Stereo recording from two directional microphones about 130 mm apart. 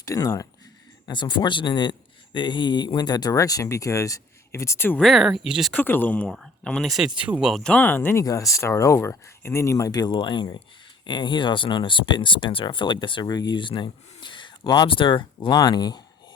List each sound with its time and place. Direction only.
0.0 s speech: 25° left (ahead or behind)
1.0 s speech: 35° left (ahead or behind); by 4.9 s 20° left (ahead or behind)
4.9 s speech: centre (ahead or behind)
5.7 s speech: 15° left (ahead or behind); by 16.0 s 35° left (ahead or behind)